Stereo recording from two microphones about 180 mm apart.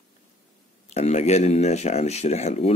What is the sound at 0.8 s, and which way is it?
Speech, 40° left (ahead or behind).